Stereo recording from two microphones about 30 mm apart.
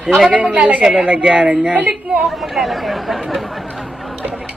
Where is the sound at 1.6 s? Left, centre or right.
Right.